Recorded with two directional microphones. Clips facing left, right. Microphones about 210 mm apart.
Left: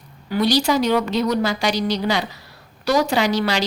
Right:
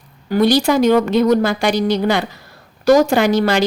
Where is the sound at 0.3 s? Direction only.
50° right (ahead or behind).